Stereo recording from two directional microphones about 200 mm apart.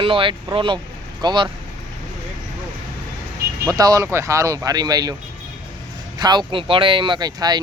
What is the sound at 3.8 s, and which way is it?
Speech, 15° right (ahead or behind).